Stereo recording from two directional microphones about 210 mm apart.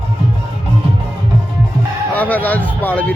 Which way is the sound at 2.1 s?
10° left (ahead or behind).